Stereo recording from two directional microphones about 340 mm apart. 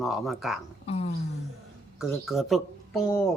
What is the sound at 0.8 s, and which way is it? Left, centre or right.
Speech, centre.